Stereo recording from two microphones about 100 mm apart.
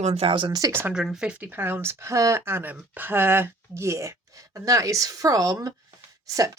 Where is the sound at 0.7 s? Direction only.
25° right (ahead or behind).